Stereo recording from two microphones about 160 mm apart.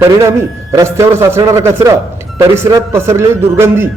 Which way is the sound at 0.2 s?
20° right (ahead or behind).